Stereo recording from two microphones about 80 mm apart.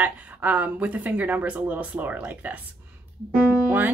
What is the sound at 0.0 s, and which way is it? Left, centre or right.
Speech, centre.